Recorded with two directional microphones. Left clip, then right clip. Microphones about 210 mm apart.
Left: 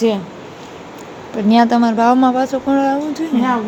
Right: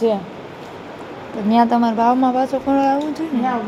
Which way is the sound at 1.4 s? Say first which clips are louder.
Left 2 dB; 15° left (ahead or behind).